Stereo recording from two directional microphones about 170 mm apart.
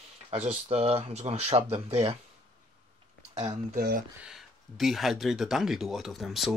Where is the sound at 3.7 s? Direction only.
55° right (ahead or behind).